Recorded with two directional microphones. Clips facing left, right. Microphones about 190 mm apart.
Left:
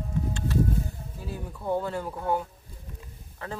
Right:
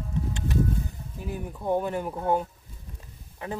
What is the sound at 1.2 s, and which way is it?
Speech, 15° right (ahead or behind).